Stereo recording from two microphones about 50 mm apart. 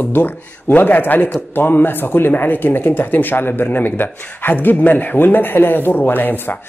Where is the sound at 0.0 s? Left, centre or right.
Left.